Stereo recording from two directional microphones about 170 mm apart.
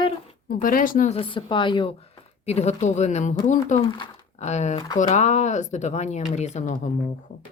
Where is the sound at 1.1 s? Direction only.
30° left (ahead or behind); by 6.9 s 45° left (ahead or behind).